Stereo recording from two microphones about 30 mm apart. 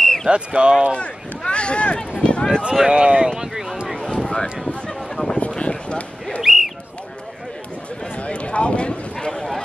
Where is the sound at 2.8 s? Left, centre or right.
Right.